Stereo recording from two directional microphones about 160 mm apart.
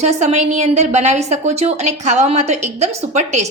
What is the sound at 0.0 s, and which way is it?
A woman's voice, 45° right (ahead or behind).